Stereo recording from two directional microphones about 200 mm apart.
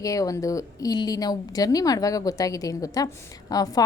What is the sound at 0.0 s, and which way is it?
A woman's voice, 15° left (ahead or behind).